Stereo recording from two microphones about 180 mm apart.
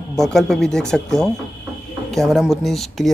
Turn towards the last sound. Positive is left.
turn(degrees=0)  # may be behind; listen again after turning